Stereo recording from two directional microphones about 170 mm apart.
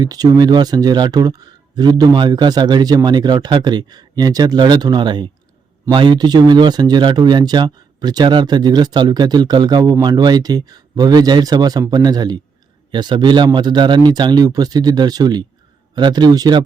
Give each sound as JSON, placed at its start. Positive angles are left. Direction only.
{"t": 0.0, "sound": "speech", "side_deg": -20}